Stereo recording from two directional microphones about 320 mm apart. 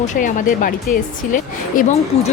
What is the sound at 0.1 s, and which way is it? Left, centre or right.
A woman's voice, left.